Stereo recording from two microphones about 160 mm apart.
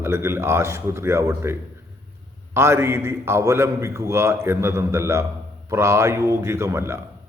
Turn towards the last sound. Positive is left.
turn(degrees=-15)  # may be behind; listen again after turning